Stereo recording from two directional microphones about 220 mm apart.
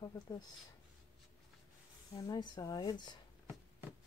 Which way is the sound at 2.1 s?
20° left (ahead or behind).